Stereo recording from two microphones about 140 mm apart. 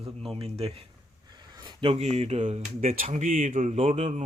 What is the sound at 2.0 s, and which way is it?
Speech, 50° right (ahead or behind).